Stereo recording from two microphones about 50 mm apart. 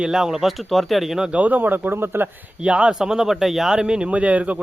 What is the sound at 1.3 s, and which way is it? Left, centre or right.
Speech, right.